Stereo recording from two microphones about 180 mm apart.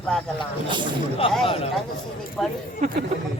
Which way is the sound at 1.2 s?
30° left (ahead or behind).